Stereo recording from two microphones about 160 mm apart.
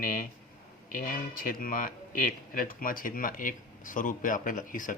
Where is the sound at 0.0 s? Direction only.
55° left (ahead or behind).